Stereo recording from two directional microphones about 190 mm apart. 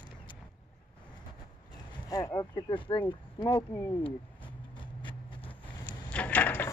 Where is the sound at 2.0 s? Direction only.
20° left (ahead or behind).